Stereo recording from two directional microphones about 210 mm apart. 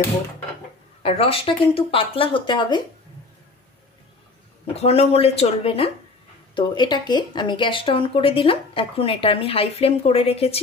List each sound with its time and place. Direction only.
1.0 s speech: 25° left (ahead or behind)
4.7 s speech: 30° left (ahead or behind)